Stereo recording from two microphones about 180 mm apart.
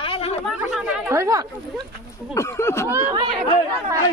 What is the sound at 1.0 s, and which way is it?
Speech, 15° right (ahead or behind).